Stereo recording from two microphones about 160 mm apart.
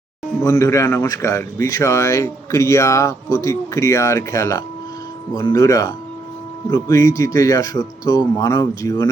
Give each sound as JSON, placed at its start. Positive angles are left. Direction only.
{"t": 0.4, "sound": "speech", "side_deg": 20}